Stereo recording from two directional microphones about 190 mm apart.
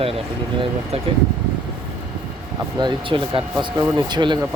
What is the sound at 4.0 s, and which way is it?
Speech, 25° right (ahead or behind).